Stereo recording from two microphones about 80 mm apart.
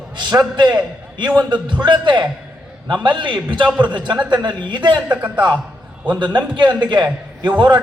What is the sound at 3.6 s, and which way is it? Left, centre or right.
Speech, centre.